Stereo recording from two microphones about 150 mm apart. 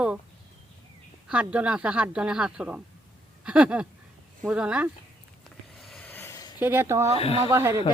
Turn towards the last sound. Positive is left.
turn(degrees=-15)  # may be behind; listen again after turning